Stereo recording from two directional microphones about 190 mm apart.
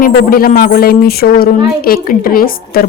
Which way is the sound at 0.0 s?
50° left (ahead or behind).